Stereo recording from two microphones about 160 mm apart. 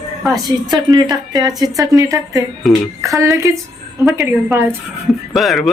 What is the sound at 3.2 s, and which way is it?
Speech, 20° right (ahead or behind).